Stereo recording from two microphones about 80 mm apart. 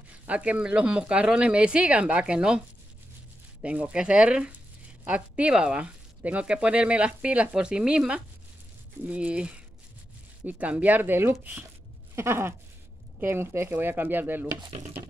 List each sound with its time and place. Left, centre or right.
0.3 s speech: centre
3.6 s speech: centre
12.2 s a sound: right
13.2 s speech: right